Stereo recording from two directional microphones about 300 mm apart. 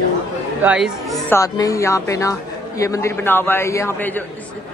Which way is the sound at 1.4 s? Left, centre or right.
Centre.